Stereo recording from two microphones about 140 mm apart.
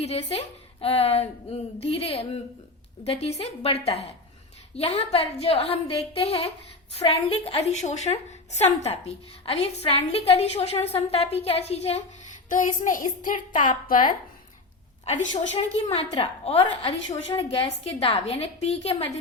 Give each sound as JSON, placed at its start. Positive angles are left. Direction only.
{"t": 0.0, "sound": "a woman's voice", "side_deg": 45}
{"t": 15.0, "sound": "a woman's voice", "side_deg": 60}
{"t": 15.5, "sound": "a woman's voice", "side_deg": 45}